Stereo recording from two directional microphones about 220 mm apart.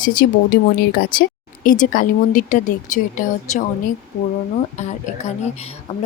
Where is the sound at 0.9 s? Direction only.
40° left (ahead or behind).